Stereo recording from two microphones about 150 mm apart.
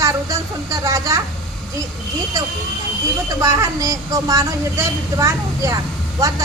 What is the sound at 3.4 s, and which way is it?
A woman's voice, 20° right (ahead or behind).